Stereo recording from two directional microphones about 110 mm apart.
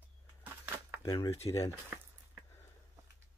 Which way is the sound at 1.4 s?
30° left (ahead or behind).